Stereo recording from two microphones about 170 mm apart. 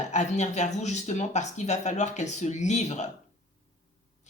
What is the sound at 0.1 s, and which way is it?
Speech, 45° left (ahead or behind).